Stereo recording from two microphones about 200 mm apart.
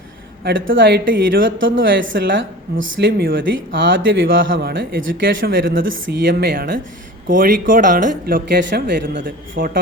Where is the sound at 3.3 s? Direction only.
70° right (ahead or behind).